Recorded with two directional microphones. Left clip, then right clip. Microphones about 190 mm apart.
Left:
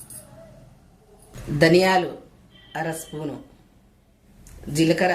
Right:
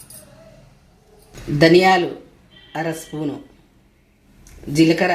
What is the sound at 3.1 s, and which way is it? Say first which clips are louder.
Speech: right 5 dB; 40° right (ahead or behind).